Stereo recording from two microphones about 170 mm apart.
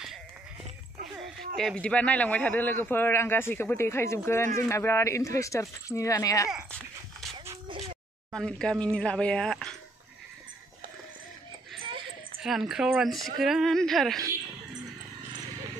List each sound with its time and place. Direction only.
1.6 s a man's voice: 5° left (ahead or behind); by 6.5 s 20° left (ahead or behind)
6.5 s dog: centre (ahead or behind)
7.3 s a sound: 25° right (ahead or behind)
8.3 s speech: 5° left (ahead or behind)
12.4 s speech: centre (ahead or behind)